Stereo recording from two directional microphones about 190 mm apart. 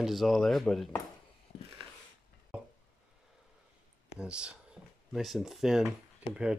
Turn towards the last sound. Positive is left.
turn(degrees=-5)  # may be behind; listen again after turning